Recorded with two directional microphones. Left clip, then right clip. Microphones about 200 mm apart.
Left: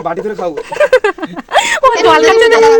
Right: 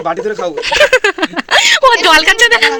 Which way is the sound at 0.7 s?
15° right (ahead or behind).